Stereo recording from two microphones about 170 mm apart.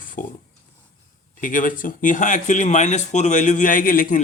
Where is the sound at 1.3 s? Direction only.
50° left (ahead or behind).